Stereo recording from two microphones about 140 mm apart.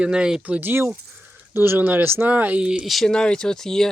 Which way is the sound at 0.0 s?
5° right (ahead or behind).